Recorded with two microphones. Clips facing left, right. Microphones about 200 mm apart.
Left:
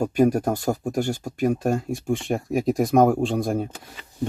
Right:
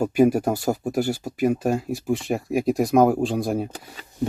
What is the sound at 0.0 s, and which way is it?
Speech, 5° right (ahead or behind).